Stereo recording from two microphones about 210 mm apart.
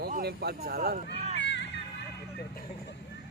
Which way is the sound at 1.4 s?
55° left (ahead or behind).